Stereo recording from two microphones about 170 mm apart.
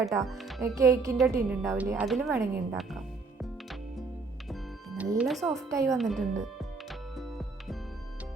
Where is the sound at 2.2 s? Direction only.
20° right (ahead or behind).